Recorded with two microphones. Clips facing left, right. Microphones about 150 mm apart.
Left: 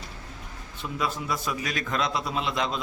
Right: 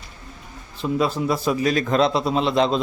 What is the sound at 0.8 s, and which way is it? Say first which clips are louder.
A man's voice: right 9 dB; 30° right (ahead or behind).